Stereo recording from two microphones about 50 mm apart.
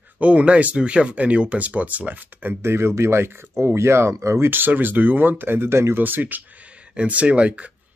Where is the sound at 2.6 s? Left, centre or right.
Right.